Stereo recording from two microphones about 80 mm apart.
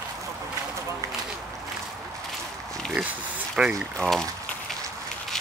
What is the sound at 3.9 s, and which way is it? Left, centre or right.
Speech, centre.